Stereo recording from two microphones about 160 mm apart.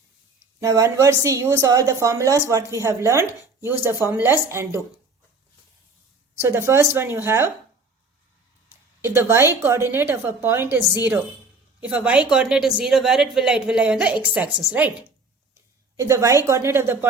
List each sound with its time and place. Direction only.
0.6 s a woman's voice: 20° right (ahead or behind)
6.4 s a woman's voice: 15° right (ahead or behind)
9.0 s a woman's voice: 15° right (ahead or behind)
16.0 s a woman's voice: 20° right (ahead or behind)